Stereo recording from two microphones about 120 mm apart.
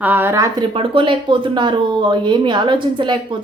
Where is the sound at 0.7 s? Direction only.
45° right (ahead or behind).